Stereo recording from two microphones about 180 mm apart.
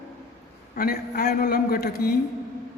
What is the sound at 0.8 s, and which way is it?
A man's voice, 60° left (ahead or behind).